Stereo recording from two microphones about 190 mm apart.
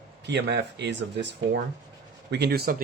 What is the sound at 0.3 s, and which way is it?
Speech, 60° right (ahead or behind).